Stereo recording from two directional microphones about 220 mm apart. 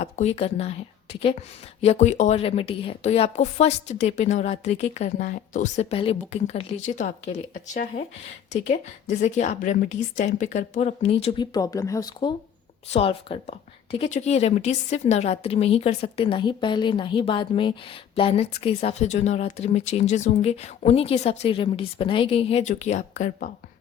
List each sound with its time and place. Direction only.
0.0 s a woman's voice: 30° left (ahead or behind)
11.5 s a woman's voice: 15° left (ahead or behind); by 23.5 s 35° left (ahead or behind)